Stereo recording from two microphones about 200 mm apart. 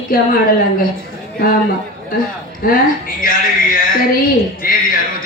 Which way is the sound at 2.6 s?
45° left (ahead or behind).